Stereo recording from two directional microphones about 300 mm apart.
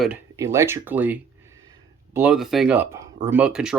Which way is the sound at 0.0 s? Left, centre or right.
Centre.